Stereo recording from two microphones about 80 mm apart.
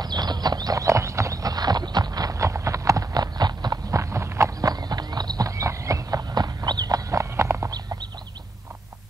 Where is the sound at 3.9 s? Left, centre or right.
Right.